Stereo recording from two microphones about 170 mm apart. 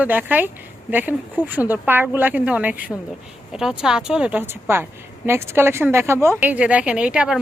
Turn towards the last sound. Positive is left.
turn(degrees=-5)  # may be behind; listen again after turning